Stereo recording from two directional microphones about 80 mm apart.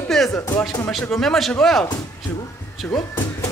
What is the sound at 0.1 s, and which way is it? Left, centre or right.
Music, centre.